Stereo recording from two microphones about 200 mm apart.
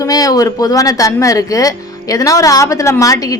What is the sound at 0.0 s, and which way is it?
Speech, 15° left (ahead or behind).